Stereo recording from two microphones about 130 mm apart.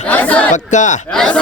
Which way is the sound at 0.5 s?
70° left (ahead or behind).